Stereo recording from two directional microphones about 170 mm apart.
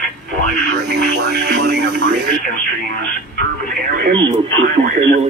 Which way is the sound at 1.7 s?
90° right.